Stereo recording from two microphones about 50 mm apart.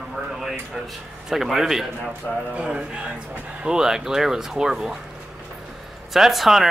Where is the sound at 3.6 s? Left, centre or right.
Centre.